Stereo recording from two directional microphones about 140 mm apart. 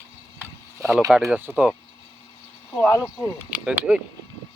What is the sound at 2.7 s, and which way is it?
Speech, 15° left (ahead or behind).